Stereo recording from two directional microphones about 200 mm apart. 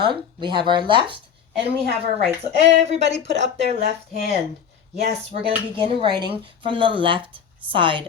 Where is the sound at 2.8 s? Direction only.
35° right (ahead or behind).